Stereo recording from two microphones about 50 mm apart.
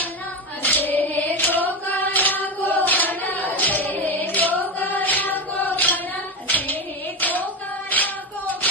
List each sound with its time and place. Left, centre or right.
0.6 s singing: left
6.4 s a sound: left
7.9 s female singing: left